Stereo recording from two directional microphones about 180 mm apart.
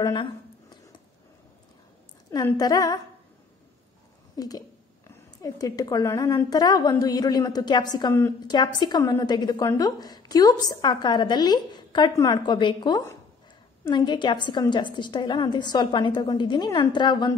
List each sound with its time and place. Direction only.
0.0 s a sound: 25° left (ahead or behind)
2.3 s a woman's voice: 20° left (ahead or behind)
4.4 s a woman's voice: 20° left (ahead or behind)